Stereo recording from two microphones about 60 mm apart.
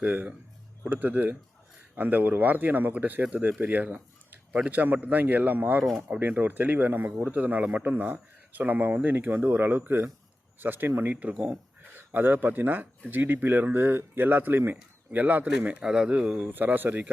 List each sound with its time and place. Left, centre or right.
0.0 s speech: right
11.2 s speech: right
15.8 s speech: centre
16.6 s speech: right